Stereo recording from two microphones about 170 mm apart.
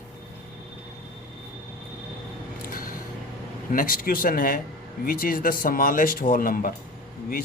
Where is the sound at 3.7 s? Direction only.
55° left (ahead or behind).